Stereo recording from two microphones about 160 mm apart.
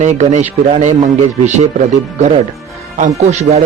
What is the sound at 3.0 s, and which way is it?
Speech, 45° right (ahead or behind).